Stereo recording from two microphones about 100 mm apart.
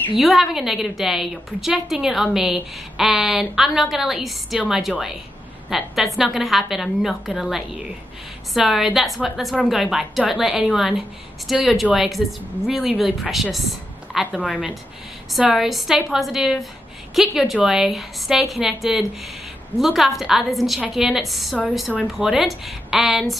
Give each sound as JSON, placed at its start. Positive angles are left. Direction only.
{"t": 0.2, "sound": "a woman's voice", "side_deg": 0}
{"t": 15.5, "sound": "a woman's voice", "side_deg": -5}